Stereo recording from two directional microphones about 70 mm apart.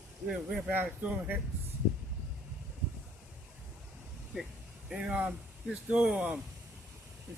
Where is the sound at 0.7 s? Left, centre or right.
Right.